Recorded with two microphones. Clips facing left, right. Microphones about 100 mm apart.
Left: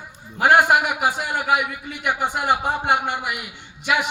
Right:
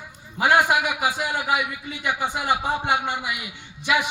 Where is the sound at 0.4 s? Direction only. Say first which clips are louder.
Left 3 dB; 50° left (ahead or behind).